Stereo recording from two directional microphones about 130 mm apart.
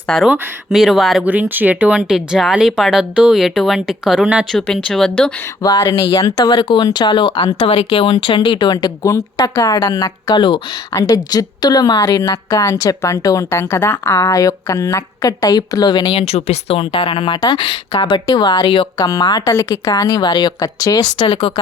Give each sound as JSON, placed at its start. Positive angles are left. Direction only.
{"t": 0.1, "sound": "speech", "side_deg": 5}
{"t": 1.2, "sound": "speech", "side_deg": -10}
{"t": 4.5, "sound": "speech", "side_deg": 5}
{"t": 5.6, "sound": "speech", "side_deg": 30}
{"t": 7.6, "sound": "a woman's voice", "side_deg": 55}
{"t": 16.2, "sound": "speech", "side_deg": 55}
{"t": 18.9, "sound": "a woman's voice", "side_deg": 30}
{"t": 21.2, "sound": "speech", "side_deg": 45}